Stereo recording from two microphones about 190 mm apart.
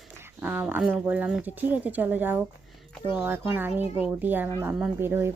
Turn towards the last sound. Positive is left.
turn(degrees=-10)  # may be behind; listen again after turning